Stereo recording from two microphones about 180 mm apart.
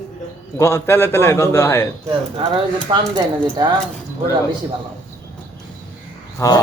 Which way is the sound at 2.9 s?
25° right (ahead or behind).